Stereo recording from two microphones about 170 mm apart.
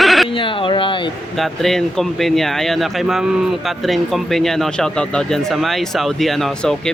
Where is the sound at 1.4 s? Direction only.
Centre (ahead or behind).